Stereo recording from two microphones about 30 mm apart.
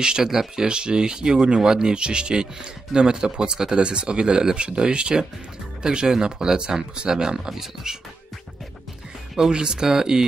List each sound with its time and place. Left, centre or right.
0.0 s speech: right
0.3 s speech: centre
0.7 s speech: right
3.7 s speech: right
9.5 s speech: right